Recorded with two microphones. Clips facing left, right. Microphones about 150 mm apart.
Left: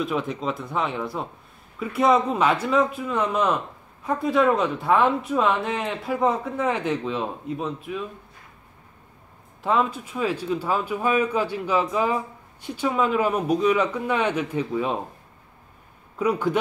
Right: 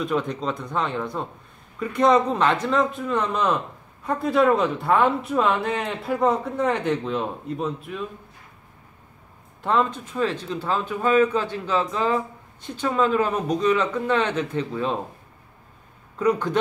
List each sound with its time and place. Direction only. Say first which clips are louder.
0.0 s speech: right 1 dB; 5° left (ahead or behind)
9.6 s speech: even; 5° left (ahead or behind)
16.2 s speech: right 1 dB; 10° left (ahead or behind)